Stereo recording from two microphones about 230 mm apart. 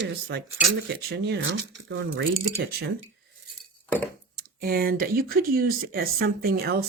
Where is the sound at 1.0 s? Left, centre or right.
Right.